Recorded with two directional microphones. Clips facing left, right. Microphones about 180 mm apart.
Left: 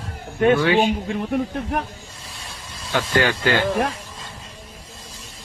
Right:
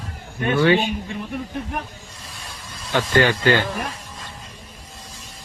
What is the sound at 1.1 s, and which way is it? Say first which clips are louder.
Speech: left 6 dB; 65° left (ahead or behind).